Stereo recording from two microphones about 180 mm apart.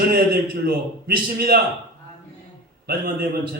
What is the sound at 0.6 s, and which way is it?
A man's voice, 55° right (ahead or behind).